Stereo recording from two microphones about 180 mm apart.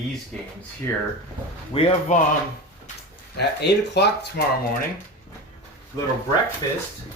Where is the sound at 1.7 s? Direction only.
30° left (ahead or behind).